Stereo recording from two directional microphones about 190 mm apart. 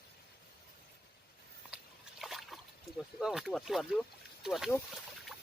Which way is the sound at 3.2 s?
Centre (ahead or behind).